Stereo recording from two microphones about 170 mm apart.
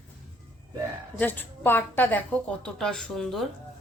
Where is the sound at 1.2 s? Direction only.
10° left (ahead or behind).